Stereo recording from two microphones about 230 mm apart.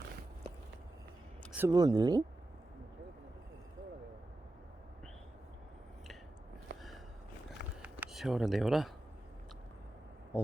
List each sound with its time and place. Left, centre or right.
1.5 s speech: centre
7.8 s a sound: centre
10.3 s speech: centre